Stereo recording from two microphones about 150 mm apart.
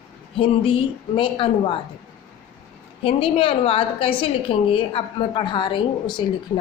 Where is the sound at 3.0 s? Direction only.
40° left (ahead or behind).